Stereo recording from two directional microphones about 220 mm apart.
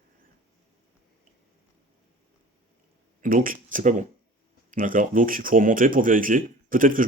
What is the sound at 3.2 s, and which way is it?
Speech, 40° right (ahead or behind).